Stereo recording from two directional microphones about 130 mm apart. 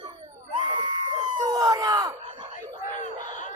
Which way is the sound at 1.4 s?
25° right (ahead or behind).